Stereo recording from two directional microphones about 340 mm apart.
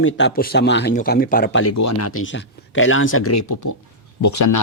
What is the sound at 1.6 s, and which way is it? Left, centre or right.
Speech, left.